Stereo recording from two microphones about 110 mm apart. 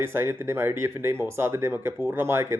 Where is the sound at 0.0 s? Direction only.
20° right (ahead or behind).